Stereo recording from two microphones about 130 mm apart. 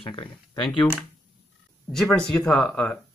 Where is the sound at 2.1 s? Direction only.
5° left (ahead or behind).